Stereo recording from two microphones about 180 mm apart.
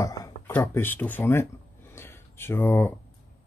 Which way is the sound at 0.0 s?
20° left (ahead or behind).